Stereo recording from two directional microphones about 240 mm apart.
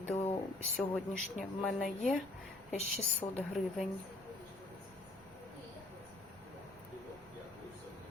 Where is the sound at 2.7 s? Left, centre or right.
Left.